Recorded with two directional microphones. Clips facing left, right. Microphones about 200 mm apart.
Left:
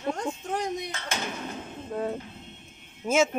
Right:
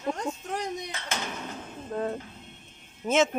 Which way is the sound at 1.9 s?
5° left (ahead or behind).